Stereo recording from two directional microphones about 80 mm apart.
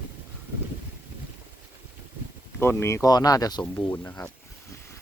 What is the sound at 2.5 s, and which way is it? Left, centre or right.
Speech, left.